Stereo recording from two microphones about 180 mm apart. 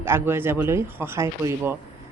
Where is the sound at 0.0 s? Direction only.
15° right (ahead or behind).